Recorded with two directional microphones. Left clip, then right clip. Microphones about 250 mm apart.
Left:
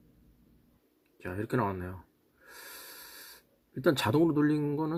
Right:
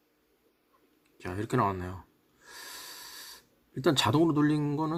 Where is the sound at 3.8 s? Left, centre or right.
Centre.